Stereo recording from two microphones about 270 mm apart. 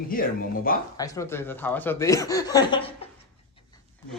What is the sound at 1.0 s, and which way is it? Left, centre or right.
Speech, centre.